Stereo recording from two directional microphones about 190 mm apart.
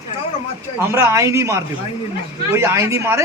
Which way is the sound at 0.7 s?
15° right (ahead or behind).